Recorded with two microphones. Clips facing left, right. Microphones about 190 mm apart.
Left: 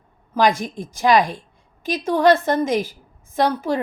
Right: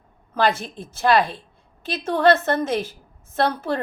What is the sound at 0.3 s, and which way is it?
A woman's voice, 10° left (ahead or behind).